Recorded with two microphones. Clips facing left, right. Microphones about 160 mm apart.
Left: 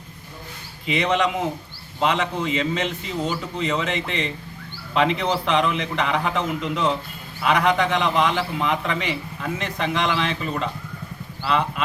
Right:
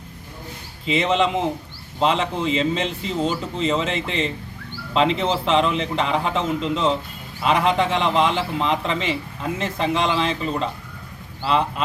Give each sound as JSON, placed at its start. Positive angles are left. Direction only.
{"t": 0.9, "sound": "a man's voice", "side_deg": -25}